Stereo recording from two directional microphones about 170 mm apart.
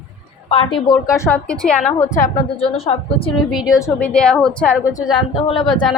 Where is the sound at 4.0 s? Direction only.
5° left (ahead or behind).